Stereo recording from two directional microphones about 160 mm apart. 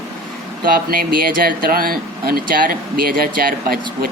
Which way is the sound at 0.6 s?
65° right (ahead or behind).